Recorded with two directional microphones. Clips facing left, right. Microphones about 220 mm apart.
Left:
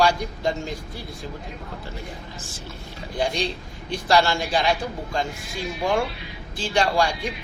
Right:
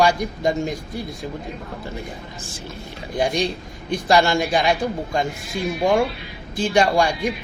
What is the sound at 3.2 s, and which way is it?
A man's voice, 15° right (ahead or behind).